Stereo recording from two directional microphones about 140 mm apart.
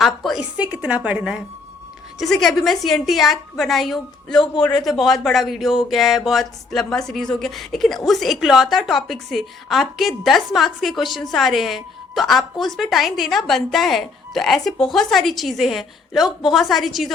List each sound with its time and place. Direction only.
0.0 s a woman's voice: centre (ahead or behind)